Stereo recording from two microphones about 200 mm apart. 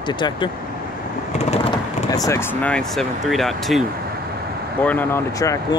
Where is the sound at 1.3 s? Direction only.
35° left (ahead or behind).